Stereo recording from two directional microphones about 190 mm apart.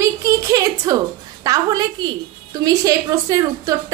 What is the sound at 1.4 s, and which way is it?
A woman's voice, 20° right (ahead or behind).